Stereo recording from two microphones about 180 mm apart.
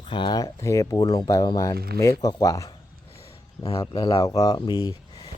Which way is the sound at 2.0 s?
20° left (ahead or behind).